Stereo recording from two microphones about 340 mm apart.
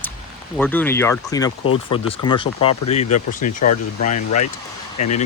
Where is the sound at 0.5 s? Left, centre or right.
Centre.